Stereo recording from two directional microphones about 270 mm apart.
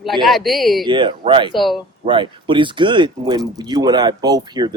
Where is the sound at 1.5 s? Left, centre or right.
Centre.